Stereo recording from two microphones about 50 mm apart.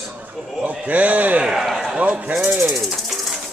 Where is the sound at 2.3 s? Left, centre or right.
Right.